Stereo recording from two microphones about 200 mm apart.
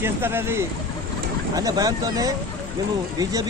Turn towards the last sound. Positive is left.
turn(degrees=-20)  # may be behind; listen again after turning